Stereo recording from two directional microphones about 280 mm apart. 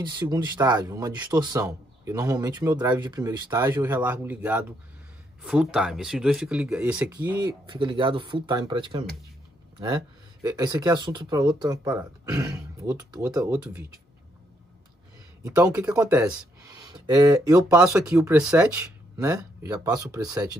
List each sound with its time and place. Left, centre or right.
0.0 s speech: centre
7.6 s speech: centre
10.4 s speech: centre
15.4 s speech: centre